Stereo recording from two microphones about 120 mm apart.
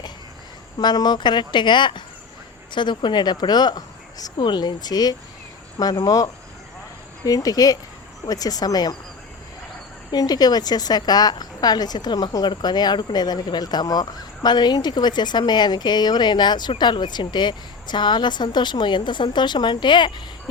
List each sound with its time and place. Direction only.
0.8 s a woman's voice: 35° left (ahead or behind)
10.1 s a woman's voice: 35° left (ahead or behind)